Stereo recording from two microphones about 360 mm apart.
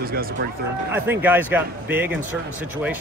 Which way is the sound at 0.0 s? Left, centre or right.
Right.